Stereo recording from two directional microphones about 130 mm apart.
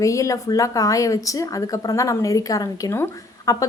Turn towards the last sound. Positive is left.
turn(degrees=25)  # may be behind; listen again after turning